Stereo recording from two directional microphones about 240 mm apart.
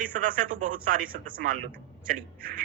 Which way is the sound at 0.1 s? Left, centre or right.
Right.